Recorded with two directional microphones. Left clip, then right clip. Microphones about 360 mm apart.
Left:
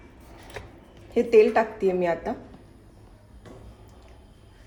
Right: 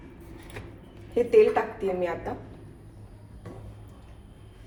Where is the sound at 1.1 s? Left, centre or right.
Left.